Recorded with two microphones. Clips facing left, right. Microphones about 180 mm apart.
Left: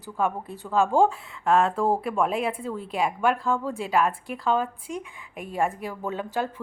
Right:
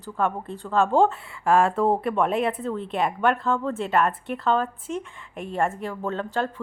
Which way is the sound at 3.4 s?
10° left (ahead or behind).